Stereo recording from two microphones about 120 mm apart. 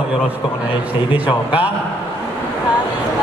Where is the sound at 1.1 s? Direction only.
10° right (ahead or behind).